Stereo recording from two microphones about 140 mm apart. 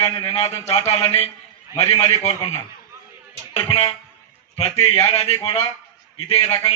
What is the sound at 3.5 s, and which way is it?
Speech, 40° left (ahead or behind).